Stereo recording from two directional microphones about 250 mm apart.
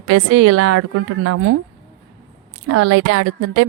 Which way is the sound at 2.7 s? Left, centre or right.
Right.